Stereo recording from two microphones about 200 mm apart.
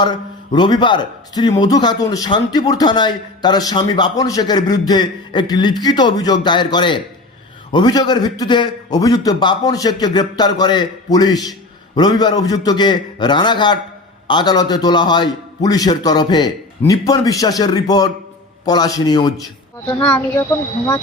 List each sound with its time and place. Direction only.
0.0 s speech: 20° left (ahead or behind)
20.0 s speech: 10° left (ahead or behind)